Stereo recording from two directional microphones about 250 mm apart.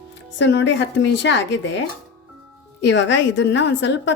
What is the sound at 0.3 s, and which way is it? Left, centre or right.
Speech, left.